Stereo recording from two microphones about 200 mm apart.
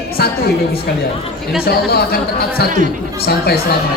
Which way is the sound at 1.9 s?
50° left (ahead or behind).